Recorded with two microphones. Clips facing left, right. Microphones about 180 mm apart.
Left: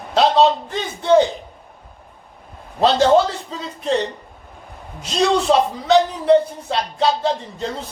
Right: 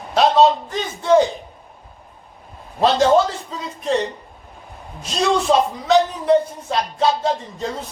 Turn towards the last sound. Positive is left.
turn(degrees=30)  # may be behind; listen again after turning